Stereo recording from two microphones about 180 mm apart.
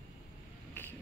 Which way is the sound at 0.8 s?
10° left (ahead or behind).